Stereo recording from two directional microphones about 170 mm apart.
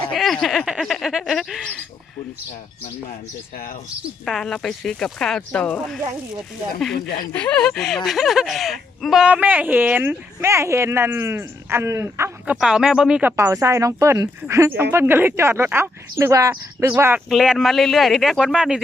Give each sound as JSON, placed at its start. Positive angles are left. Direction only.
{"t": 0.1, "sound": "speech", "side_deg": 0}
{"t": 4.3, "sound": "speech", "side_deg": 5}
{"t": 7.3, "sound": "speech", "side_deg": 5}
{"t": 12.5, "sound": "speech", "side_deg": -5}
{"t": 13.3, "sound": "speech", "side_deg": -15}